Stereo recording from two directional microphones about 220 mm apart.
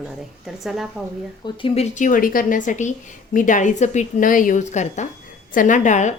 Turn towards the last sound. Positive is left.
turn(degrees=35)  # may be behind; listen again after turning